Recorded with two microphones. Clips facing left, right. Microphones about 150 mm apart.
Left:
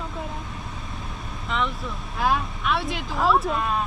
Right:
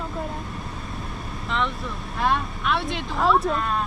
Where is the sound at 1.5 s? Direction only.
Centre (ahead or behind).